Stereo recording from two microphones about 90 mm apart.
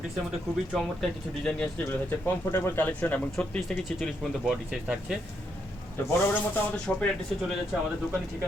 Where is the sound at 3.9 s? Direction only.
Centre (ahead or behind).